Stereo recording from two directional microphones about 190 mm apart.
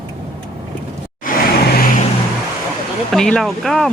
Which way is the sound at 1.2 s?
50° left (ahead or behind).